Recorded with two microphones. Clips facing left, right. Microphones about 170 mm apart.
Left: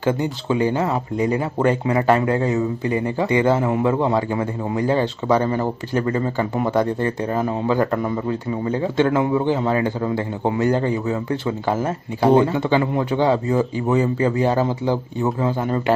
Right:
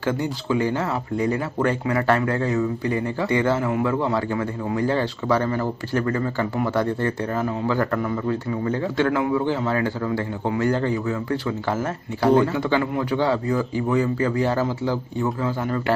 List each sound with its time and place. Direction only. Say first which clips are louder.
0.0 s speech: left 3 dB; 20° left (ahead or behind)